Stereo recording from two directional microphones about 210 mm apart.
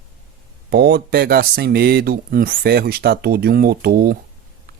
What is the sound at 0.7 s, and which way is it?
Speech, 50° right (ahead or behind).